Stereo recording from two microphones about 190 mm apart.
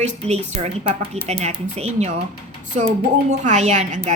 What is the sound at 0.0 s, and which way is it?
Speech, 35° right (ahead or behind).